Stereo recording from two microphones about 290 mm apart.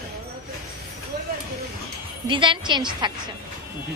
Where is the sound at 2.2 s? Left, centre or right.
Centre.